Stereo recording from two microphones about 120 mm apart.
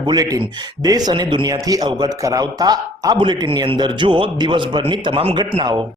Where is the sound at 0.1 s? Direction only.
30° right (ahead or behind).